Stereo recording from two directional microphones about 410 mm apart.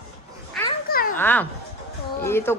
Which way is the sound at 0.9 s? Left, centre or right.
Left.